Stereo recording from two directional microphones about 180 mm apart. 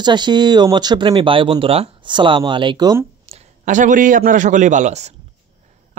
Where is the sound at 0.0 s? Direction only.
25° right (ahead or behind).